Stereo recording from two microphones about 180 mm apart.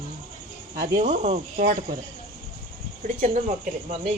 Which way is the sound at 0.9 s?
45° right (ahead or behind).